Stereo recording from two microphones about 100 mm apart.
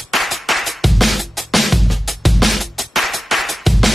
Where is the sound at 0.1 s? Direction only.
Centre (ahead or behind).